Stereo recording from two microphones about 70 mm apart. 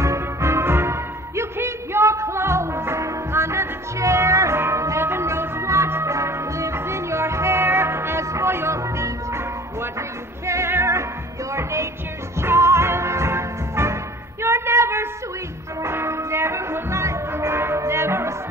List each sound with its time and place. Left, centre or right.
0.0 s music: right
14.4 s a sound: right
15.8 s music: right